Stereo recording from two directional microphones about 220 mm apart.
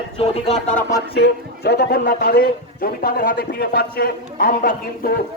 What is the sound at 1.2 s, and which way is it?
A man's voice, 50° left (ahead or behind).